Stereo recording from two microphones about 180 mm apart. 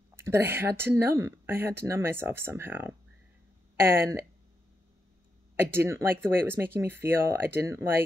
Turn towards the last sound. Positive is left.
turn(degrees=-15)  # may be behind; listen again after turning